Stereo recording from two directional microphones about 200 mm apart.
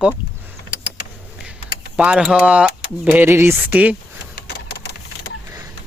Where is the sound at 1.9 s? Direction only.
5° right (ahead or behind).